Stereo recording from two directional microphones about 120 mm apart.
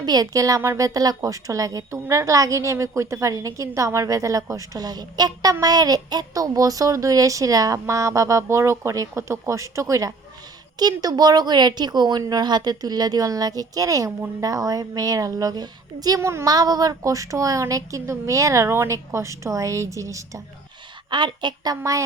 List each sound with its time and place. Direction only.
0.0 s a woman's voice: 35° right (ahead or behind)
21.1 s speech: 40° right (ahead or behind)
21.8 s a woman's voice: 25° right (ahead or behind)